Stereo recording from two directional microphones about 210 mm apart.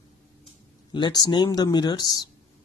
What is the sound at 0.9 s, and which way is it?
Speech, 20° left (ahead or behind).